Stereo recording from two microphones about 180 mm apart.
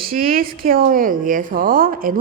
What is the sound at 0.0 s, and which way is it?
Speech, 55° right (ahead or behind).